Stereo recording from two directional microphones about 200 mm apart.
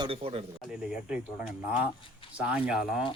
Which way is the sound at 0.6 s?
5° right (ahead or behind).